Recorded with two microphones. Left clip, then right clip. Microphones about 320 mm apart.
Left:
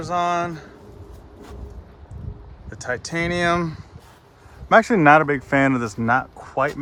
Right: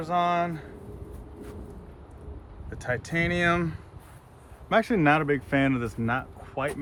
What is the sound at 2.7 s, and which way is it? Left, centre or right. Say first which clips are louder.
Speech: left 4 dB; centre.